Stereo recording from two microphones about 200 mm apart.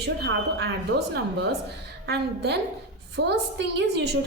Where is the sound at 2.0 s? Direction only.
55° right (ahead or behind).